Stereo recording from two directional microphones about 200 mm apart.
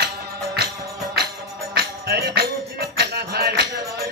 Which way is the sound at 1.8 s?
50° right (ahead or behind).